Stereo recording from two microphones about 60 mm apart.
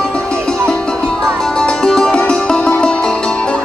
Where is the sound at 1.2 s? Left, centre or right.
Centre.